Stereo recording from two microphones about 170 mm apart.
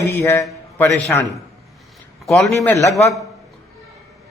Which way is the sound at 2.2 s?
Centre (ahead or behind).